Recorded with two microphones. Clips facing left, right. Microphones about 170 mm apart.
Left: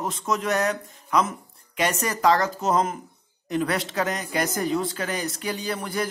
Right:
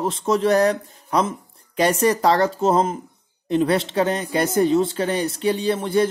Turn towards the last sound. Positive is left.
turn(degrees=-25)  # may be behind; listen again after turning